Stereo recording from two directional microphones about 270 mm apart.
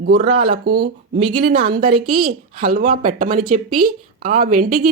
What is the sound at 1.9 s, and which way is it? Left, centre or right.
Speech, right.